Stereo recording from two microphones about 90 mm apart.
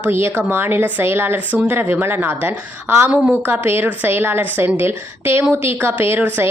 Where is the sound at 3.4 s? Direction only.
20° right (ahead or behind).